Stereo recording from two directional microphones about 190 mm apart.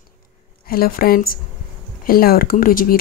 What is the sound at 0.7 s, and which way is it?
Speech, 50° left (ahead or behind).